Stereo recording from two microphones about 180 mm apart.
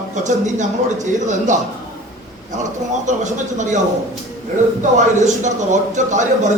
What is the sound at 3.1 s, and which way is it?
Speech, 45° right (ahead or behind).